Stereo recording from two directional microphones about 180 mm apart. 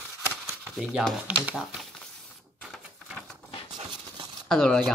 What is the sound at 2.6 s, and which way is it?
Typewriter, 5° right (ahead or behind).